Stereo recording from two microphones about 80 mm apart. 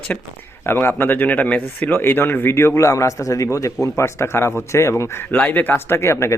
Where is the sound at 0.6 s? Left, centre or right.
Left.